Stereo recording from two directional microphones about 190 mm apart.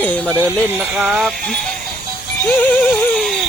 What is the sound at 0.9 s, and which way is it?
Speech, 5° right (ahead or behind).